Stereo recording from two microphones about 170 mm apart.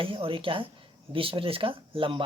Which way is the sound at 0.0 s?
30° right (ahead or behind).